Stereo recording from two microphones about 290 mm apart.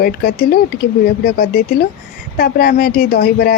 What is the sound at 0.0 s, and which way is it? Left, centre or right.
Speech, left.